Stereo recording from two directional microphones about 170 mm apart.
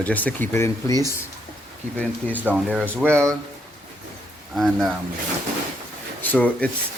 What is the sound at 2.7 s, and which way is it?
Speech, 10° right (ahead or behind).